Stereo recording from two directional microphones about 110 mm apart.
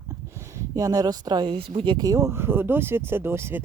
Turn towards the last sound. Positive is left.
turn(degrees=-20)  # may be behind; listen again after turning